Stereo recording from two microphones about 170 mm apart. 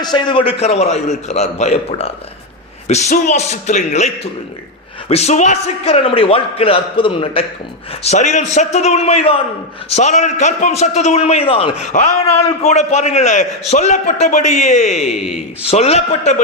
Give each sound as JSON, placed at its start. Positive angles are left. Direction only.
{"t": 0.0, "sound": "a man's voice", "side_deg": 25}
{"t": 8.0, "sound": "a man's voice", "side_deg": 40}
{"t": 15.1, "sound": "speech", "side_deg": -5}
{"t": 15.6, "sound": "a man's voice", "side_deg": 40}